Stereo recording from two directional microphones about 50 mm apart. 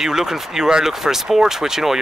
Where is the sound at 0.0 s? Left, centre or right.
Centre.